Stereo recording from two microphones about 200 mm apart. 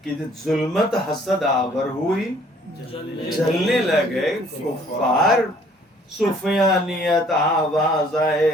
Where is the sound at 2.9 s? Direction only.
25° left (ahead or behind).